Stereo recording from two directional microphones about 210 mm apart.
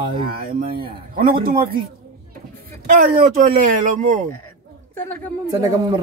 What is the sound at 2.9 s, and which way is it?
Speech, 45° right (ahead or behind).